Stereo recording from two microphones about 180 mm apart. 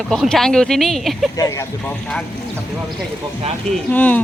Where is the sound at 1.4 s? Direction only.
15° left (ahead or behind).